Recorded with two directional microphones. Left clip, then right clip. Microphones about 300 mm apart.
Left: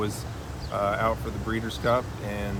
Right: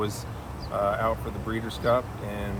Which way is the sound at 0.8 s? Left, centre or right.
Centre.